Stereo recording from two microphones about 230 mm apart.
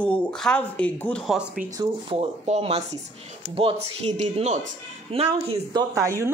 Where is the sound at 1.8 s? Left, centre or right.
Right.